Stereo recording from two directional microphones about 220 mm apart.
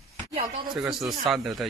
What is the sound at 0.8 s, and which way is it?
Speech, centre (ahead or behind).